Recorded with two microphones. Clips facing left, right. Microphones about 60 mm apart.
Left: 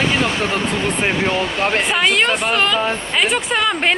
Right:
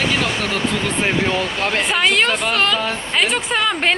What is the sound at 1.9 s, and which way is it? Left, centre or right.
A woman's voice, centre.